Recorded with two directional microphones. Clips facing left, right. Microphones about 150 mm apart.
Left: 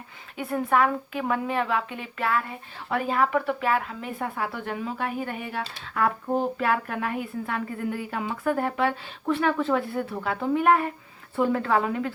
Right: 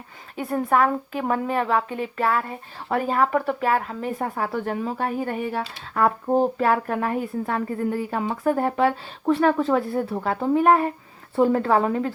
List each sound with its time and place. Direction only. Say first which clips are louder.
0.3 s a woman's voice: right 2 dB; 40° right (ahead or behind)